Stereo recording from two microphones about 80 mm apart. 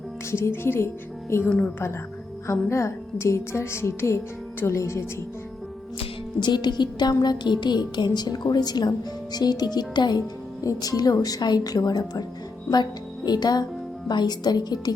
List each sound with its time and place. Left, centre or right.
0.3 s speech: left
1.5 s a woman's voice: centre
2.5 s speech: left
6.4 s speech: left
10.6 s a woman's voice: left